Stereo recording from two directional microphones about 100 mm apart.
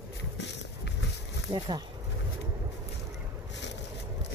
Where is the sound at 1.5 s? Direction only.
45° right (ahead or behind).